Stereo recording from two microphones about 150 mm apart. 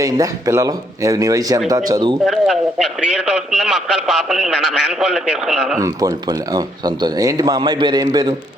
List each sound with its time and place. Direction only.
0.0 s speech: 25° right (ahead or behind)
2.2 s a man's voice: centre (ahead or behind)
5.8 s speech: 25° right (ahead or behind)